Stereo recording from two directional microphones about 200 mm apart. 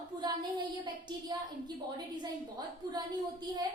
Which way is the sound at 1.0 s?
20° right (ahead or behind).